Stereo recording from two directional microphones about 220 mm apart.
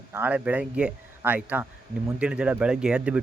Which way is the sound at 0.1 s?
10° right (ahead or behind).